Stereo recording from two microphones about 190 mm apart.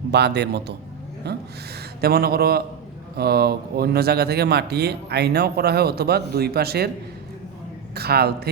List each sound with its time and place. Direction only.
0.1 s speech: 60° right (ahead or behind)
7.9 s speech: 55° right (ahead or behind)